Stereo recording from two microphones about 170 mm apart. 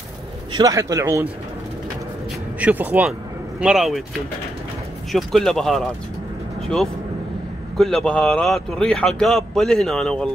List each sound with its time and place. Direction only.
0.5 s a man's voice: 25° right (ahead or behind)
2.6 s speech: 10° right (ahead or behind)
7.7 s speech: centre (ahead or behind)